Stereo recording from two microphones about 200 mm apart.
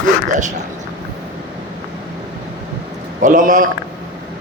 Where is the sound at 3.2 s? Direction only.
40° right (ahead or behind).